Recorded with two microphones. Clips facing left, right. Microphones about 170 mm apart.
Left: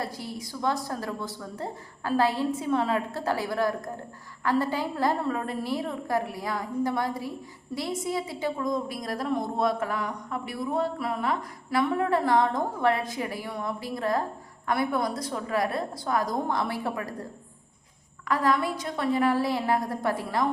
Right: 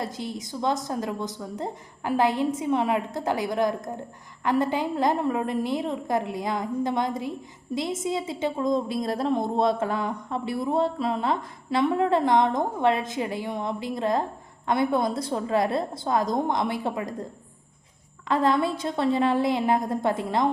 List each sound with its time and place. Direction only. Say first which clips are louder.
0.0 s a woman's voice: right 2 dB; 20° right (ahead or behind)
18.3 s a woman's voice: right 3 dB; 25° right (ahead or behind)